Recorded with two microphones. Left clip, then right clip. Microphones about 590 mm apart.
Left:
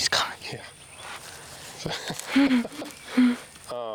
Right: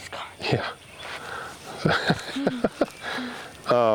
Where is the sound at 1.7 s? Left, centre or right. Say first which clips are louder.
Right 10 dB; right.